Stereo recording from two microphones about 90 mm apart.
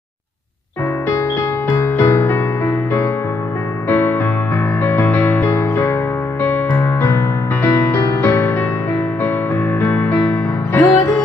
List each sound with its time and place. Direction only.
1.7 s music: 35° left (ahead or behind)
9.8 s music: 20° left (ahead or behind)